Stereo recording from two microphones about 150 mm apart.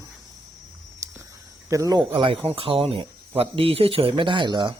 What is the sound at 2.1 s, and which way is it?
Speech, 35° right (ahead or behind).